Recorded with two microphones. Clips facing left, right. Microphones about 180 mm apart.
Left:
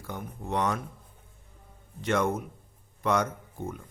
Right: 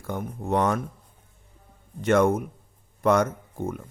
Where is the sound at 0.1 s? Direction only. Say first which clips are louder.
Right 7 dB; 50° right (ahead or behind).